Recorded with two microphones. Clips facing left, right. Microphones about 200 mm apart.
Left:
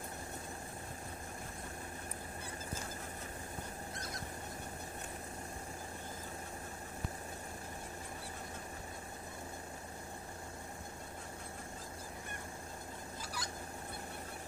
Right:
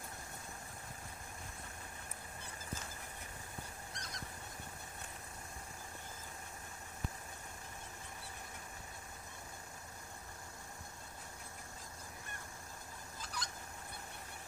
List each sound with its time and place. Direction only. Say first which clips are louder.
13.2 s fowl: even; 5° left (ahead or behind)